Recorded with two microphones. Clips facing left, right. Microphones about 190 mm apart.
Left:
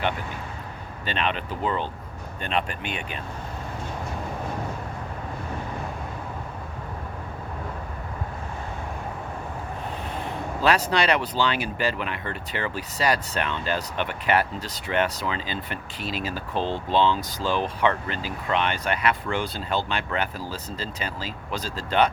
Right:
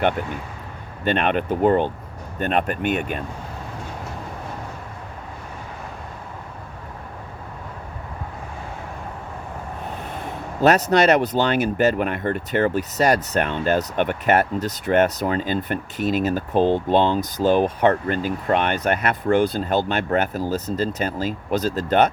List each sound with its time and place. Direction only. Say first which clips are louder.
1.0 s speech: right 8 dB; 50° right (ahead or behind)
10.6 s speech: right 6 dB; 45° right (ahead or behind)